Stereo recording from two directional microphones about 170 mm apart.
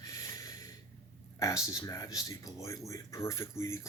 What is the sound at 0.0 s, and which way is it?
Snort, 20° left (ahead or behind).